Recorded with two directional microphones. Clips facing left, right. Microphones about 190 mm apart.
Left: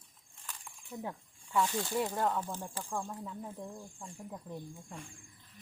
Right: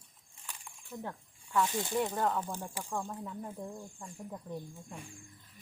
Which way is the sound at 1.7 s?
20° right (ahead or behind).